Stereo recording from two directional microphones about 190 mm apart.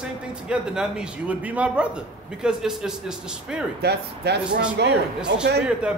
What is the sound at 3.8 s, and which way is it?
Speech, 60° right (ahead or behind).